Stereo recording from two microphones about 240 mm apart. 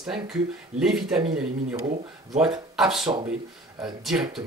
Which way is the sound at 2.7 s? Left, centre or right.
Centre.